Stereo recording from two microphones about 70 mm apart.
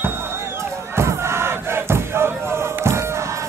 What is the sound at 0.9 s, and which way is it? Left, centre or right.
Battle cry, right.